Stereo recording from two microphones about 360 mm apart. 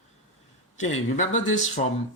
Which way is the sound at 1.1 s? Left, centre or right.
Centre.